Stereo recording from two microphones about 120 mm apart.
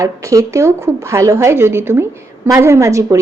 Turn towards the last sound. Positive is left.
turn(degrees=-25)  # may be behind; listen again after turning